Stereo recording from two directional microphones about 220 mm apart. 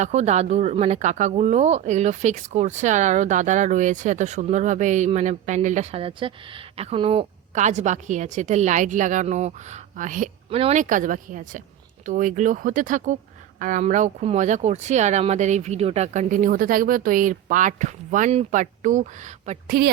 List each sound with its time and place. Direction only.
0.0 s speech: 30° right (ahead or behind)